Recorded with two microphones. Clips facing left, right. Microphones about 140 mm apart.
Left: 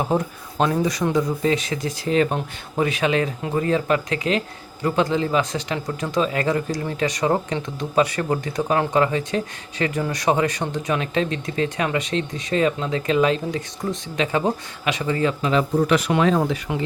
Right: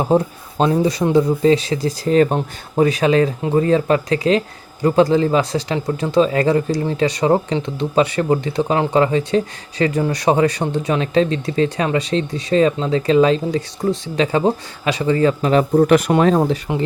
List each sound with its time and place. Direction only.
0.1 s speech: 30° right (ahead or behind)